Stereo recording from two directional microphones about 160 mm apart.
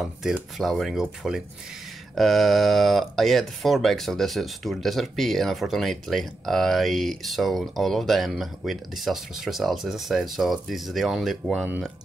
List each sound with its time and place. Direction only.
0.0 s speech: centre (ahead or behind)